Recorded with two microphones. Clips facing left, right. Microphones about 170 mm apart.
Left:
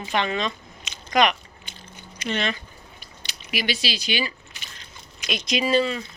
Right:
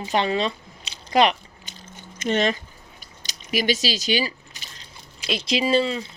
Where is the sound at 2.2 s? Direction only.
45° right (ahead or behind).